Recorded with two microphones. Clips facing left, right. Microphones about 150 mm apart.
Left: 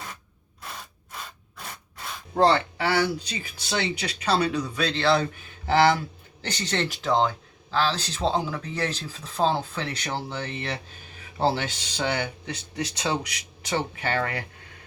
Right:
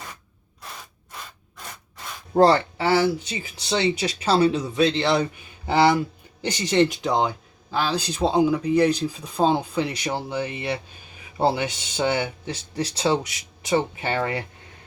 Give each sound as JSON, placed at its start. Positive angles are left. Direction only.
{"t": 2.3, "sound": "speech", "side_deg": -40}
{"t": 2.7, "sound": "speech", "side_deg": -25}